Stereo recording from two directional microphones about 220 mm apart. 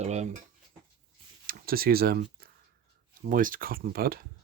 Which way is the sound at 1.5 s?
40° right (ahead or behind).